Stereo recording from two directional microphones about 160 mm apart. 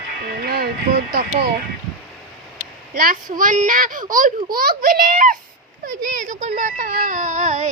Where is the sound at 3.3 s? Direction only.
55° right (ahead or behind).